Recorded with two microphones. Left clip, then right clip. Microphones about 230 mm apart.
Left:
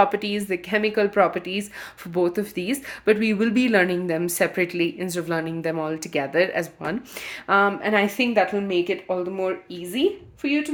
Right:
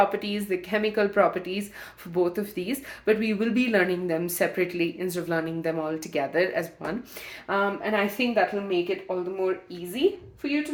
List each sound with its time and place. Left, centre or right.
0.0 s speech: left